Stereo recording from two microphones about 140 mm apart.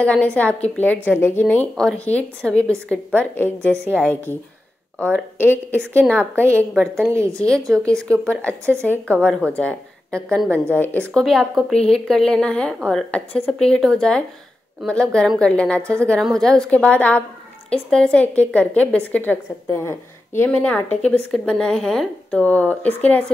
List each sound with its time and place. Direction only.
0.0 s speech: 10° left (ahead or behind)
3.7 s a woman's voice: 15° right (ahead or behind)
4.0 s a woman's voice: 10° left (ahead or behind)